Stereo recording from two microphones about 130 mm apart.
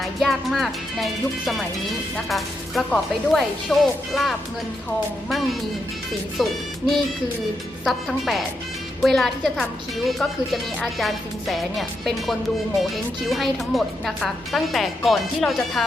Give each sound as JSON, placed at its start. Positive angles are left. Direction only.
{"t": 0.0, "sound": "music", "side_deg": 0}
{"t": 2.3, "sound": "speech", "side_deg": 0}
{"t": 6.3, "sound": "speech", "side_deg": 0}